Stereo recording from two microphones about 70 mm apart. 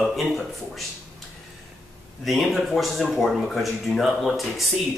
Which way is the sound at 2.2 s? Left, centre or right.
Centre.